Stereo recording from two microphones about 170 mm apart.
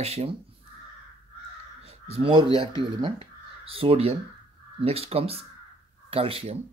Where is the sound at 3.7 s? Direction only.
35° right (ahead or behind).